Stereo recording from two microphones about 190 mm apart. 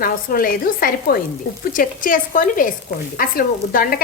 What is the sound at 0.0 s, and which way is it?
A woman's voice, 50° left (ahead or behind).